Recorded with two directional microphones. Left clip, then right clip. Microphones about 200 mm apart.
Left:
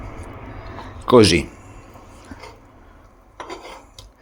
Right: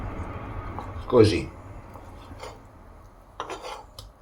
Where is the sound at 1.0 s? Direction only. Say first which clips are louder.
Left 6 dB; 55° left (ahead or behind).